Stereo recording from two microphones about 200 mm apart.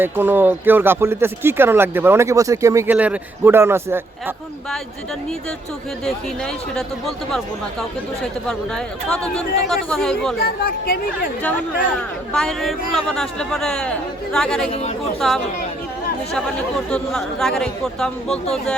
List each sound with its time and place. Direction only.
0.0 s speech: 10° right (ahead or behind)
6.1 s speech: centre (ahead or behind)
10.4 s speech: 45° left (ahead or behind)
11.4 s speech: 5° left (ahead or behind)